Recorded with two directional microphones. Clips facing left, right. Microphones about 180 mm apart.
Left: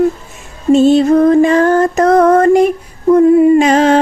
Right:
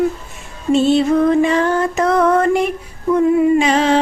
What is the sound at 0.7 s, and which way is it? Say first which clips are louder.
Music: left 5 dB; 45° left (ahead or behind).